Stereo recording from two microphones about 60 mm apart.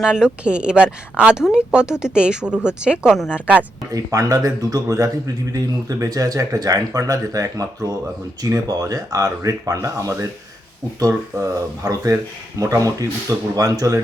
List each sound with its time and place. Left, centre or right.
0.0 s speech: centre
3.9 s speech: right
8.4 s speech: right
11.8 s speech: right
12.1 s speech: right